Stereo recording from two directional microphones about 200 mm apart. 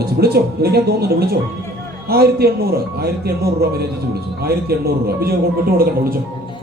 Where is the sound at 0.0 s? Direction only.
50° right (ahead or behind).